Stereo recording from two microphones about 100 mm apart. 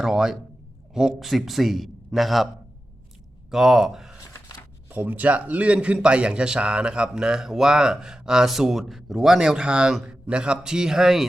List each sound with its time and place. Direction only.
0.0 s a man's voice: 5° right (ahead or behind)
3.5 s speech: 5° right (ahead or behind)
4.2 s a sound: 30° left (ahead or behind)
4.9 s a man's voice: 15° right (ahead or behind)